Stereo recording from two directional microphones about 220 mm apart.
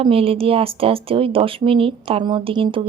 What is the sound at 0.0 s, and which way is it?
Speech, 25° right (ahead or behind).